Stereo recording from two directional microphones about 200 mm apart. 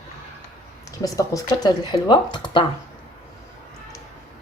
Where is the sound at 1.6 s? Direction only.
20° left (ahead or behind).